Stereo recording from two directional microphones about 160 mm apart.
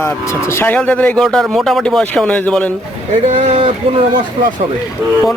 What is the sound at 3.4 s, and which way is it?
Speech, 35° right (ahead or behind).